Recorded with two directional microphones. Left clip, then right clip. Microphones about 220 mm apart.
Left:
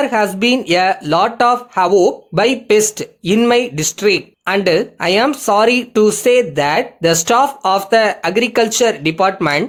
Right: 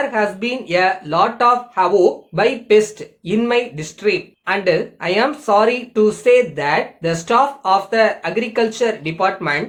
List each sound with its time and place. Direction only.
0.1 s speech: 50° left (ahead or behind)